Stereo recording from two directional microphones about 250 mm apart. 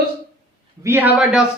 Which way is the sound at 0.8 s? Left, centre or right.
Centre.